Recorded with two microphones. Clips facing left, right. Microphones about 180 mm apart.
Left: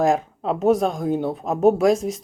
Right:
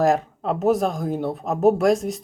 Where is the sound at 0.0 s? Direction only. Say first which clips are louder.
Even; centre (ahead or behind).